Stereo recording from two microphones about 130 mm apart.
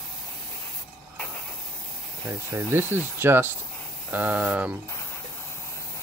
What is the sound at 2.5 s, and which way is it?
Speech, 15° right (ahead or behind).